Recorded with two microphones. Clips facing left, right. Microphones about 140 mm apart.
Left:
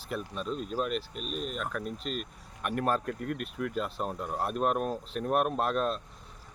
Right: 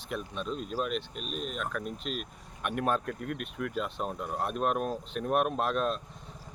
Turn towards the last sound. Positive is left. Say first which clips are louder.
# even
turn(degrees=0)  # may be behind; listen again after turning